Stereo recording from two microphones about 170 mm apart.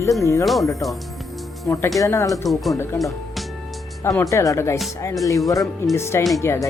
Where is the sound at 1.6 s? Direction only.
20° left (ahead or behind).